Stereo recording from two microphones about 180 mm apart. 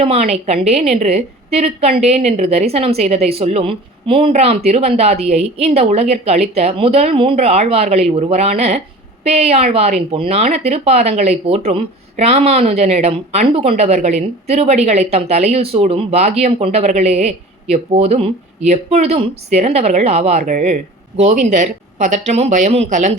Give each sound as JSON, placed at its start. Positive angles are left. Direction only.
{"t": 0.0, "sound": "speech", "side_deg": -35}